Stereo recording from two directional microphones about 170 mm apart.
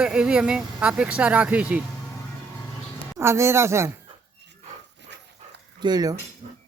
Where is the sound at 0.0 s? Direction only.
5° right (ahead or behind).